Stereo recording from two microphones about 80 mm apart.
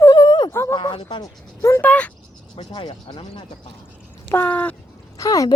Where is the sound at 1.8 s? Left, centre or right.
Centre.